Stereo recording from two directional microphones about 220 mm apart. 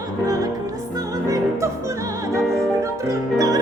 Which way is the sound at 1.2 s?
15° right (ahead or behind).